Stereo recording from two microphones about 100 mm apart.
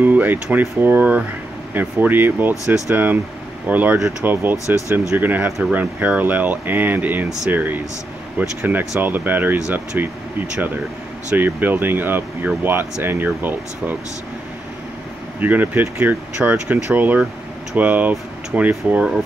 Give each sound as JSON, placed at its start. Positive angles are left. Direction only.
{"t": 0.0, "sound": "speech", "side_deg": -20}
{"t": 15.4, "sound": "speech", "side_deg": -20}